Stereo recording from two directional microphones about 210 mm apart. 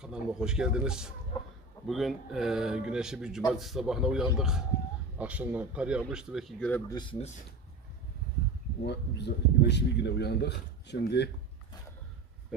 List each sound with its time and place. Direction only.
0.0 s speech: 5° right (ahead or behind)
6.9 s speech: 25° left (ahead or behind)
8.9 s speech: 55° left (ahead or behind)